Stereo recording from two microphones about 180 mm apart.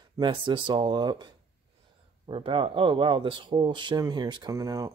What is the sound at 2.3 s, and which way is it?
Speech, 30° right (ahead or behind).